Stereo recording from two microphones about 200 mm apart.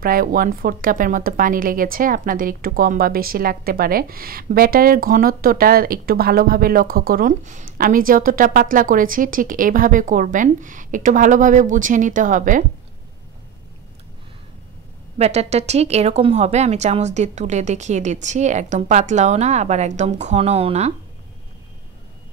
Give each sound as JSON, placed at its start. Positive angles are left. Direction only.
{"t": 0.0, "sound": "a woman's voice", "side_deg": -45}
{"t": 15.1, "sound": "a woman's voice", "side_deg": -30}